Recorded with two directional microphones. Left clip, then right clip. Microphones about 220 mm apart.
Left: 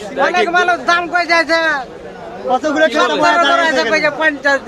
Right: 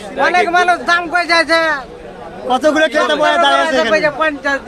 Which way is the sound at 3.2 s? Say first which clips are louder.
Even; 5° left (ahead or behind).